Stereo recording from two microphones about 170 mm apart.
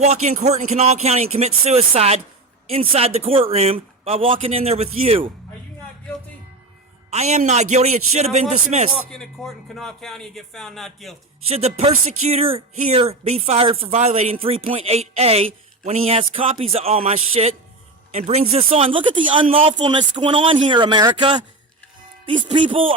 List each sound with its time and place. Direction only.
0.0 s speech: 40° right (ahead or behind)
7.1 s speech: 40° right (ahead or behind)
9.0 s speech: 5° left (ahead or behind)
11.4 s a man's voice: 35° right (ahead or behind)
22.5 s speech: 30° right (ahead or behind)